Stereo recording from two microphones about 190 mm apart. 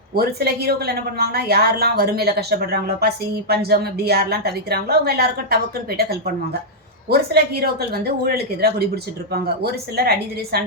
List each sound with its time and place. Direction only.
0.1 s a woman's voice: 55° right (ahead or behind)